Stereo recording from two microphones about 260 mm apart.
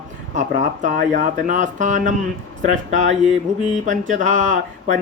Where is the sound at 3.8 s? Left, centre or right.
Right.